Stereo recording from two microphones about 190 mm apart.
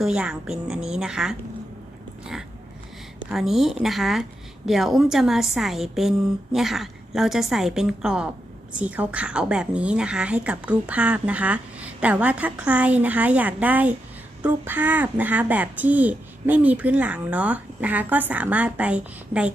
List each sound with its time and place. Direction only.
0.0 s a woman's voice: 5° right (ahead or behind)
3.2 s a woman's voice: centre (ahead or behind)